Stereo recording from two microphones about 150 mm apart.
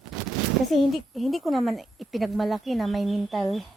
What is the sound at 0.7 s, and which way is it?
A woman's voice, centre (ahead or behind).